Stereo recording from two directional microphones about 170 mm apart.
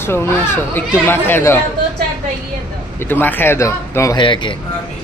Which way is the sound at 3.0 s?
10° left (ahead or behind).